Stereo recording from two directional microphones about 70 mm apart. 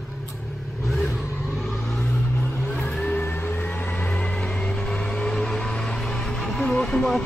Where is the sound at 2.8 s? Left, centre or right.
Left.